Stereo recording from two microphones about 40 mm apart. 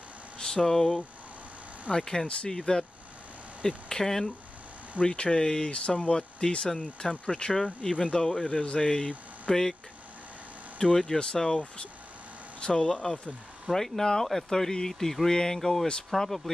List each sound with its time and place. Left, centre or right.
0.4 s vehicle: centre
0.7 s speech: centre
2.0 s speech: centre
5.0 s speech: left
5.7 s speech: left; by 9.8 s centre
10.8 s speech: centre
13.7 s speech: centre